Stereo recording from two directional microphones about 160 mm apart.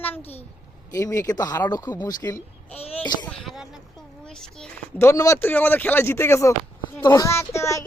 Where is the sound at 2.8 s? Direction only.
40° left (ahead or behind).